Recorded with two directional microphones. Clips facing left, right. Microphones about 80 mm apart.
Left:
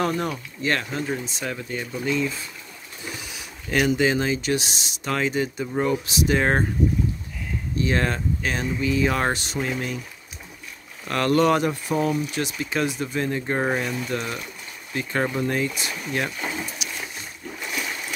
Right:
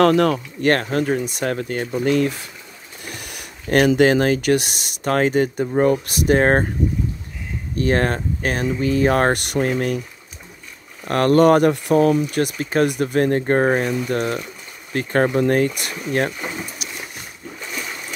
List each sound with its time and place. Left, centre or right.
0.0 s speech: right
0.7 s speech: right
2.0 s speech: right
7.7 s speech: right
11.1 s speech: right
12.9 s speech: right
16.3 s speech: centre